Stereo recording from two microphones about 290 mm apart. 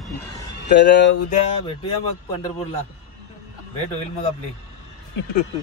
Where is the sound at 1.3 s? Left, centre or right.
Left.